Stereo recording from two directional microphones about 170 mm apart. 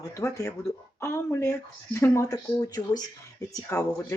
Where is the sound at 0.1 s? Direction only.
15° left (ahead or behind).